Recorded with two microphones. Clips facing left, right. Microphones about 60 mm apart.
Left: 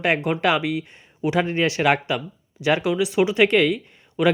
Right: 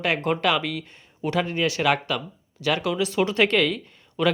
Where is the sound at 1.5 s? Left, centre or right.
Left.